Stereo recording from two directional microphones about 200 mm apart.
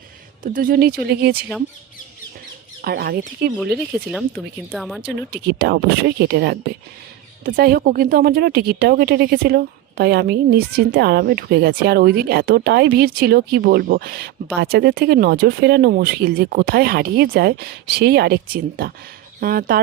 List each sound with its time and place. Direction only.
0.4 s a woman's voice: 45° right (ahead or behind)
2.8 s a woman's voice: 50° right (ahead or behind)
4.7 s speech: centre (ahead or behind)
5.3 s a woman's voice: 55° right (ahead or behind)